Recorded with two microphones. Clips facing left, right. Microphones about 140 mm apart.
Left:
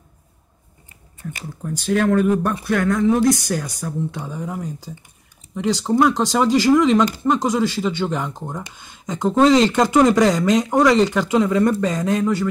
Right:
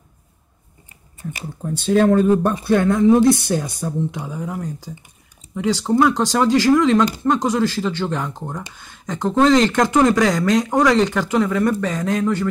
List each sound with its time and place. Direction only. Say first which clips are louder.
1.2 s speech: right 2 dB; 25° right (ahead or behind)
4.1 s speech: right 1 dB; 5° right (ahead or behind)
11.4 s speech: left 2 dB; 20° left (ahead or behind)